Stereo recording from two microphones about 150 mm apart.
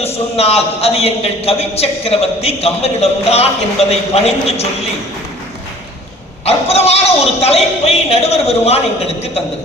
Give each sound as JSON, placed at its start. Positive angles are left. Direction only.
{"t": 0.0, "sound": "a man's voice", "side_deg": 45}
{"t": 6.4, "sound": "a man's voice", "side_deg": 45}